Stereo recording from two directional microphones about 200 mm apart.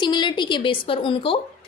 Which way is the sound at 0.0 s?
20° left (ahead or behind).